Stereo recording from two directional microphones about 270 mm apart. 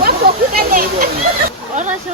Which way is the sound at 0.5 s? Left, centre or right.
Right.